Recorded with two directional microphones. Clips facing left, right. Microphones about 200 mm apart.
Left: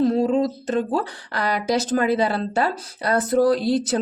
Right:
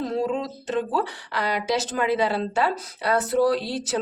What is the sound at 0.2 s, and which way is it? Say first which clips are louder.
A woman's voice: left 6 dB; 40° left (ahead or behind).